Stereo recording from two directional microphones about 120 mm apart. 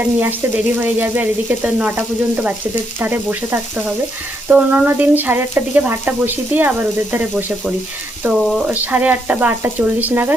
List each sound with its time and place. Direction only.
0.0 s frying: 15° right (ahead or behind)